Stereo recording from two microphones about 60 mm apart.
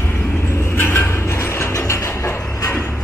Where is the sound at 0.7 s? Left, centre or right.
Left.